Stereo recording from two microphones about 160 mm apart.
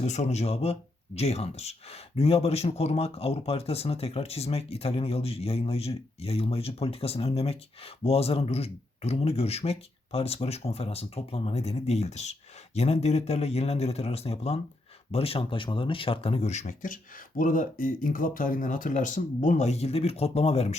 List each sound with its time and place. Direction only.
0.0 s speech: 45° left (ahead or behind)